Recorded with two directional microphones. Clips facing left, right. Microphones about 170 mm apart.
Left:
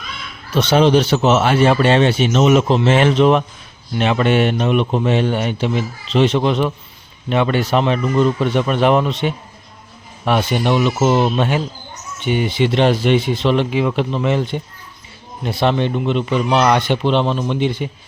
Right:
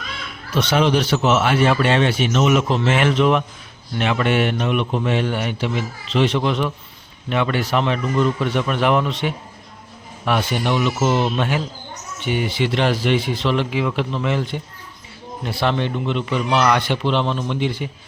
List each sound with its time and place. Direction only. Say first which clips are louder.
0.5 s speech: left 5 dB; 30° left (ahead or behind)